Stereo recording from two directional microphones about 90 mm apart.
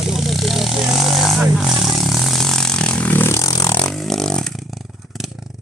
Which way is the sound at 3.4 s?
45° left (ahead or behind).